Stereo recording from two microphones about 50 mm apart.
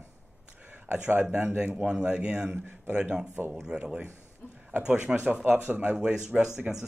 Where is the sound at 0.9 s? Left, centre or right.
Right.